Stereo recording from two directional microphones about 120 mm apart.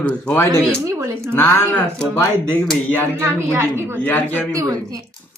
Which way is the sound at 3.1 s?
20° right (ahead or behind).